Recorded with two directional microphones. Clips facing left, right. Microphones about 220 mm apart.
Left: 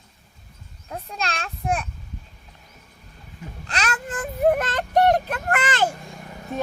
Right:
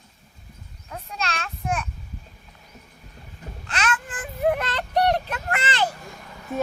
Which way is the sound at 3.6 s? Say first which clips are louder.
Even; 35° left (ahead or behind).